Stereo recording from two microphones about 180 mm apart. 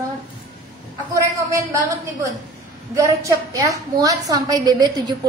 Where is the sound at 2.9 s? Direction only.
20° right (ahead or behind).